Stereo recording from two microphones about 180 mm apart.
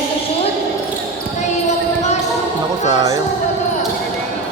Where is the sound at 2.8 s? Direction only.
20° right (ahead or behind).